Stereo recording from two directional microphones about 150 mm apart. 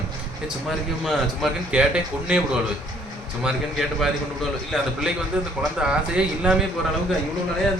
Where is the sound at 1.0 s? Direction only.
5° right (ahead or behind).